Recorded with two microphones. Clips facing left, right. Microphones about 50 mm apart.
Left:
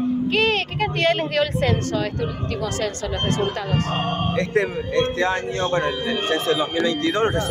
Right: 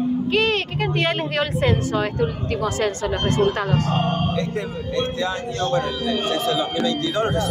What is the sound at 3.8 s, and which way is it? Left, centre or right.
A man's voice, left.